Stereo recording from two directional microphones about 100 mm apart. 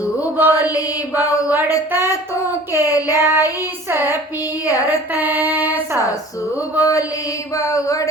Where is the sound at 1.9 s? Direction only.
25° right (ahead or behind).